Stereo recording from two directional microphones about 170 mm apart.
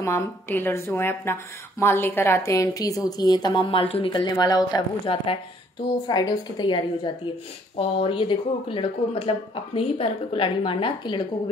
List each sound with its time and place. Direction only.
0.0 s a woman's voice: 15° left (ahead or behind); by 11.2 s 30° left (ahead or behind)